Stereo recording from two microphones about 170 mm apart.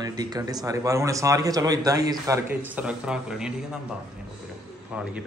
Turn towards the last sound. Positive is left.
turn(degrees=-5)  # may be behind; listen again after turning